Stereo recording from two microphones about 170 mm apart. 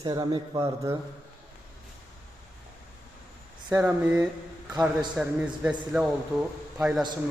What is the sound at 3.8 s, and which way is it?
A man's voice, 10° right (ahead or behind).